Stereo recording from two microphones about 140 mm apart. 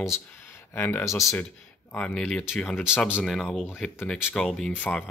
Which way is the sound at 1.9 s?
5° left (ahead or behind).